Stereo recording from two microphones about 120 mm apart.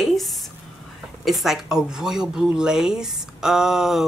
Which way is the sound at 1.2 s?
Centre (ahead or behind).